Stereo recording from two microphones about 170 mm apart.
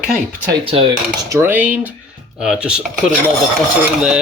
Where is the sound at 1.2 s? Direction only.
15° right (ahead or behind).